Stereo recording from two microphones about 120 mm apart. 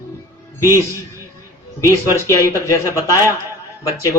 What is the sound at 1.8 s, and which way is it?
Speech, 25° left (ahead or behind).